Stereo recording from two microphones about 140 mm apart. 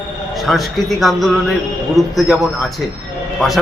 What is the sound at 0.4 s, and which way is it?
A man's voice, centre (ahead or behind).